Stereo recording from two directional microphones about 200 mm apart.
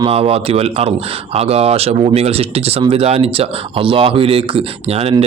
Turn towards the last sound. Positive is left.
turn(degrees=-30)  # may be behind; listen again after turning